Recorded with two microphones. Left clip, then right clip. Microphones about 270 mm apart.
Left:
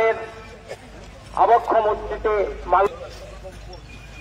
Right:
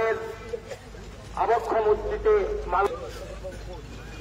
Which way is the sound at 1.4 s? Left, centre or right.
Left.